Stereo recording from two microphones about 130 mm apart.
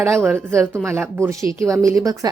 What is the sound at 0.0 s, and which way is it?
Speech, 20° right (ahead or behind).